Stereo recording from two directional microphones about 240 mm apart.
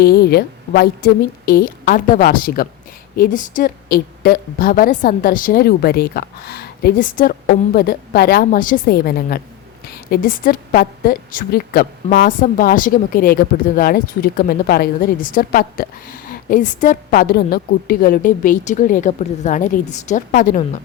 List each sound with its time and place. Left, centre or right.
0.0 s a woman's voice: left